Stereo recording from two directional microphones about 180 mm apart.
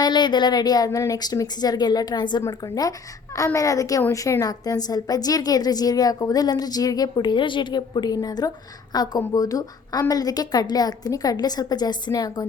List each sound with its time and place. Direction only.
0.0 s a woman's voice: 25° left (ahead or behind)